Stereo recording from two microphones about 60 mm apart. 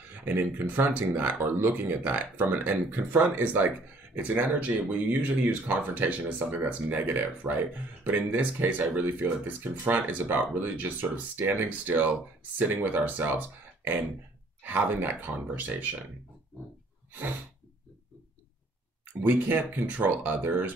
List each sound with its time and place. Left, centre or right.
0.1 s speech: right
19.2 s speech: right